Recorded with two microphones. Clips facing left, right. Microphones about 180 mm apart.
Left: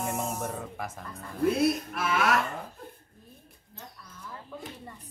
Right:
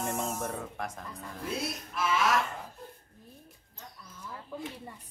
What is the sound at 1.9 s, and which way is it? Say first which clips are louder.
Speech: left 1 dB; 60° left (ahead or behind).